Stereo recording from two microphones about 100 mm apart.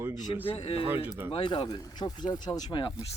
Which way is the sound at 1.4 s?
50° left (ahead or behind).